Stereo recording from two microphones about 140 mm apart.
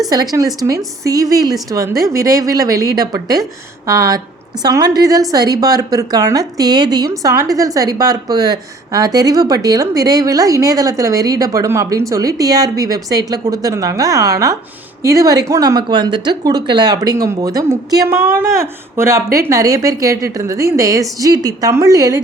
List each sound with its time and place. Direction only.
0.1 s a woman's voice: 25° right (ahead or behind)